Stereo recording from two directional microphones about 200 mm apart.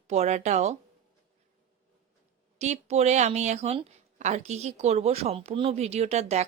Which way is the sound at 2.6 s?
35° right (ahead or behind).